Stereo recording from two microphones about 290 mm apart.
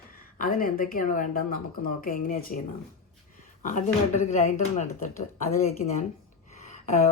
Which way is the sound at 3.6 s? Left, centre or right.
Left.